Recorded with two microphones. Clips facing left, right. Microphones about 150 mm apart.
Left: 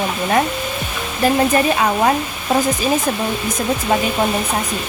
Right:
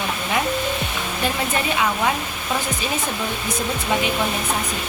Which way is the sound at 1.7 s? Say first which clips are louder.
Left 5 dB; 40° left (ahead or behind).